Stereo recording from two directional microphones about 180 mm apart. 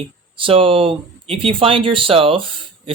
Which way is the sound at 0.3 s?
30° right (ahead or behind).